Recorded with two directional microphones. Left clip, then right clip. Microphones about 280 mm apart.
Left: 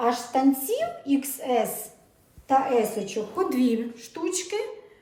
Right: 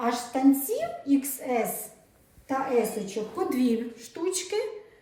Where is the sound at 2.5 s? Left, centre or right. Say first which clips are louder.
Left 4 dB; centre.